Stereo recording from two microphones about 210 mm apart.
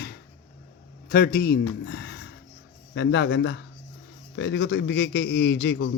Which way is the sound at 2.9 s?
55° left (ahead or behind).